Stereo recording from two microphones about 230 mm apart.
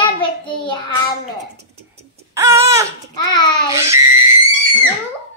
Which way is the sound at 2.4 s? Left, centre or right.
Centre.